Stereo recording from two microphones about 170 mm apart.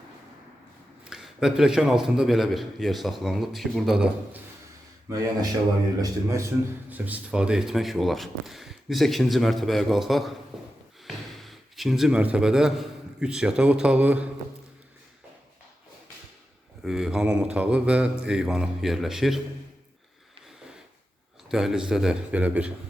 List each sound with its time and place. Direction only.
1.1 s speech: 5° right (ahead or behind)
5.0 s a man's voice: 20° right (ahead or behind)
16.8 s speech: centre (ahead or behind)
21.5 s speech: 5° right (ahead or behind)